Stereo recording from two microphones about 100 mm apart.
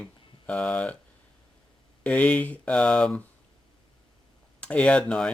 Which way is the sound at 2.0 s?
15° left (ahead or behind).